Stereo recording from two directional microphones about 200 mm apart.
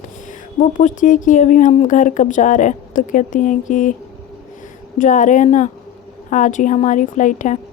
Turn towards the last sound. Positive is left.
turn(degrees=40)  # may be behind; listen again after turning